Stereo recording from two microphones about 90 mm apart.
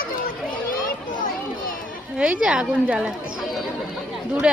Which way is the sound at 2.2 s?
10° right (ahead or behind).